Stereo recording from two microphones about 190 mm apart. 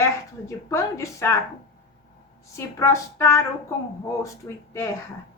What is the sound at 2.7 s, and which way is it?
A woman's voice, 15° left (ahead or behind).